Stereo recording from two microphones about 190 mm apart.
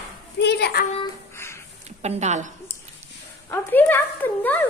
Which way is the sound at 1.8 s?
35° right (ahead or behind).